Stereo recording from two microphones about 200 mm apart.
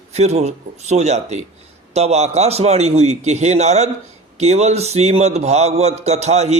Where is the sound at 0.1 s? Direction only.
35° right (ahead or behind).